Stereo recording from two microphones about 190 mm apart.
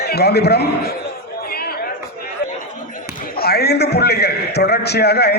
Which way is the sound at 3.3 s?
55° left (ahead or behind).